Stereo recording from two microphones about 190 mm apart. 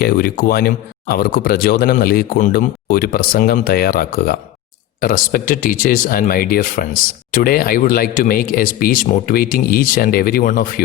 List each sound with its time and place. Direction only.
0.0 s speech: 50° left (ahead or behind)